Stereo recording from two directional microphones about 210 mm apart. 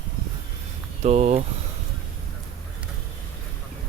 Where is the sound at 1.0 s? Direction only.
30° right (ahead or behind).